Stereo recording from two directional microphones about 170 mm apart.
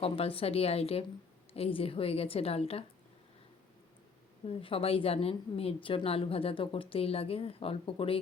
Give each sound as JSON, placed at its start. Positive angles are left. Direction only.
{"t": 0.0, "sound": "a woman's voice", "side_deg": 35}
{"t": 4.4, "sound": "a woman's voice", "side_deg": 35}